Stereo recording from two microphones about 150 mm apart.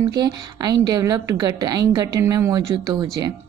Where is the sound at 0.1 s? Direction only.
25° right (ahead or behind).